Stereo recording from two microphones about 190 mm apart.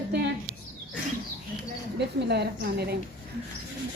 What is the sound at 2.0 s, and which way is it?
A woman's voice, 60° right (ahead or behind).